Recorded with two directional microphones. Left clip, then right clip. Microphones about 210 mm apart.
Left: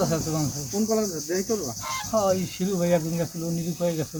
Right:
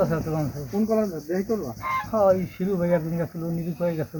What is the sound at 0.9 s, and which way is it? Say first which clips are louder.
Cricket: right 2 dB; 30° right (ahead or behind).